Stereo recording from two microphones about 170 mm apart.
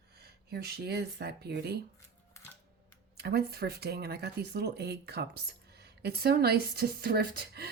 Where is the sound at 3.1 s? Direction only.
70° right (ahead or behind).